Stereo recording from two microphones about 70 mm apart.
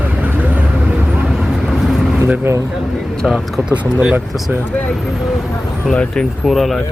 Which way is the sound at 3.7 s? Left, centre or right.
Centre.